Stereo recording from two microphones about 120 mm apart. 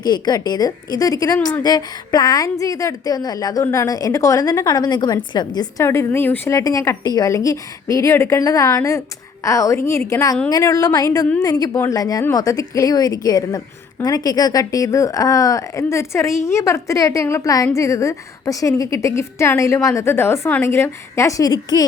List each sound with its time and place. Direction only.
0.0 s a woman's voice: 35° left (ahead or behind)
5.8 s a woman's voice: 20° left (ahead or behind)
6.5 s a woman's voice: 30° left (ahead or behind)